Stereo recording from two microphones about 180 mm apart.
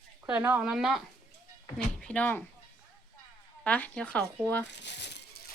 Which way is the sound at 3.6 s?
10° left (ahead or behind).